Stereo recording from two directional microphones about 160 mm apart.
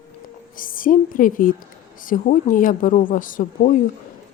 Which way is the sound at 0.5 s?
60° left (ahead or behind).